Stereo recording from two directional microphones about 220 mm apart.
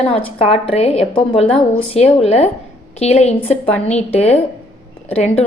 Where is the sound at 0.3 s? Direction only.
25° left (ahead or behind).